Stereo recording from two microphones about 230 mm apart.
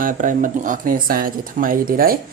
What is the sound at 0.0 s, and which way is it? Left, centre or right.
Speech, right.